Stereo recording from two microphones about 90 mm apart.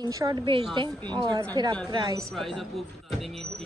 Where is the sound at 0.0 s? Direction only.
45° right (ahead or behind).